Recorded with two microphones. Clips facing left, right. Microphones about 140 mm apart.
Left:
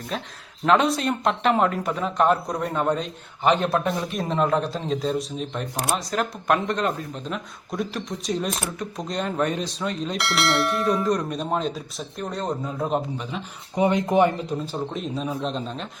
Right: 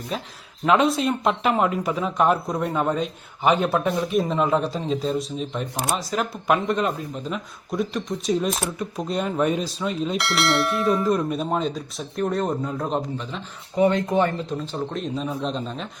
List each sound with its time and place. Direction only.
0.1 s speech: 5° right (ahead or behind)
13.7 s speech: 20° left (ahead or behind)
14.9 s speech: centre (ahead or behind)